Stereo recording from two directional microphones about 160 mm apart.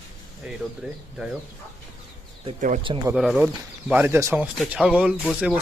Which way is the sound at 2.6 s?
55° right (ahead or behind).